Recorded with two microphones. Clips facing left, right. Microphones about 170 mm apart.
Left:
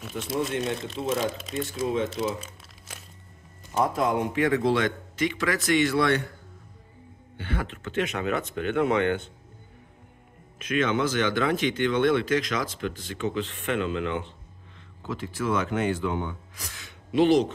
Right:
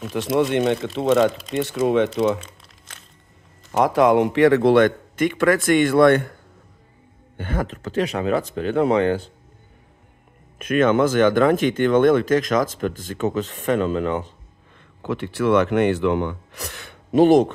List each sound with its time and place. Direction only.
0.1 s speech: 80° right
3.7 s a man's voice: 80° right; by 6.3 s 50° right (ahead or behind)
7.3 s speech: 45° right (ahead or behind)
10.6 s speech: 50° right (ahead or behind)
15.0 s speech: 65° right (ahead or behind)
17.1 s speech: 45° right (ahead or behind)